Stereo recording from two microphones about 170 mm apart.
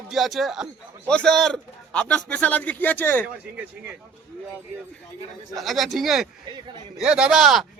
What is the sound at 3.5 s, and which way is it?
Speech, 10° right (ahead or behind).